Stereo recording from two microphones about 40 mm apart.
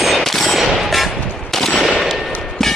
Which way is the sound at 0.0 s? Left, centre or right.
Centre.